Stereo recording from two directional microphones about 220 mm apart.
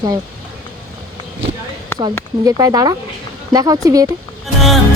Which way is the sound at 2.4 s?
15° right (ahead or behind).